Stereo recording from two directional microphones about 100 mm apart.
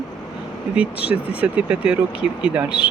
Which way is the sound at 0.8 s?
15° right (ahead or behind).